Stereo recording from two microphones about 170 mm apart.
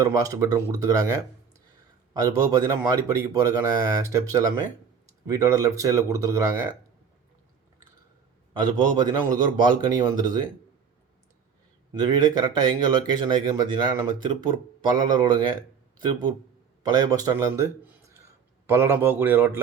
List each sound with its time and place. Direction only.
0.0 s speech: 20° right (ahead or behind)
2.2 s speech: 20° right (ahead or behind)
8.5 s speech: 25° right (ahead or behind)
11.9 s a man's voice: 25° right (ahead or behind)